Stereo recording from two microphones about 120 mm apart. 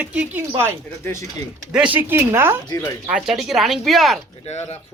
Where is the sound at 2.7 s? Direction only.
30° left (ahead or behind).